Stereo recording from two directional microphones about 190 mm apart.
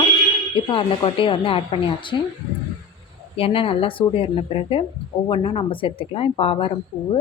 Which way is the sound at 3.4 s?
30° left (ahead or behind).